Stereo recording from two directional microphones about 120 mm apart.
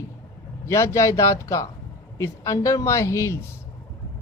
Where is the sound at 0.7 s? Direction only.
25° left (ahead or behind).